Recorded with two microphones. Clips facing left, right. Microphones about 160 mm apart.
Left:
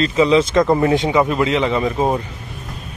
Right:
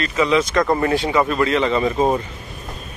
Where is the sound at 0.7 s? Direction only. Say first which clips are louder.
Left 3 dB; 15° left (ahead or behind).